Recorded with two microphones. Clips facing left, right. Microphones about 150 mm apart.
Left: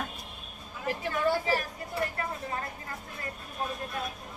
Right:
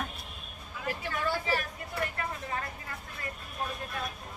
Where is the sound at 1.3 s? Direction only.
35° left (ahead or behind).